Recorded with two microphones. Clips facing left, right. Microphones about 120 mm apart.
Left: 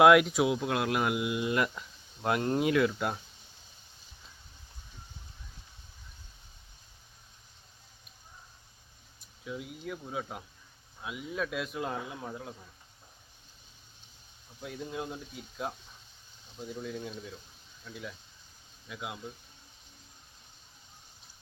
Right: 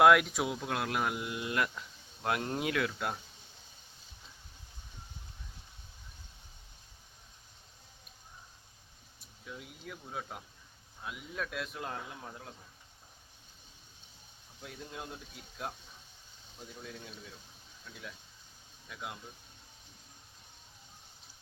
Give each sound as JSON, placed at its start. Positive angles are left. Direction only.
{"t": 0.0, "sound": "speech", "side_deg": 5}
{"t": 9.4, "sound": "speech", "side_deg": 0}
{"t": 14.6, "sound": "speech", "side_deg": 5}